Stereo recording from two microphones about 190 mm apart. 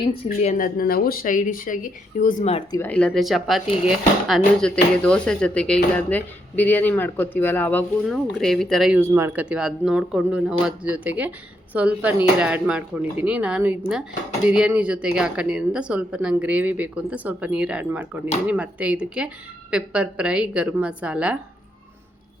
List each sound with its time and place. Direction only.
0.3 s speech: 45° left (ahead or behind)
2.7 s speech: 10° left (ahead or behind)